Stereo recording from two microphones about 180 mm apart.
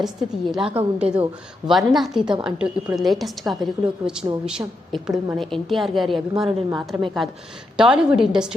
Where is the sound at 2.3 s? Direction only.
25° right (ahead or behind).